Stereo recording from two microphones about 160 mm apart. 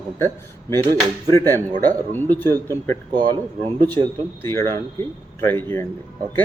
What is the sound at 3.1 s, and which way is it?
Speech, 35° right (ahead or behind).